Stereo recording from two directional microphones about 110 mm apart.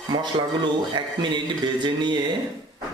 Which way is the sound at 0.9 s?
45° right (ahead or behind).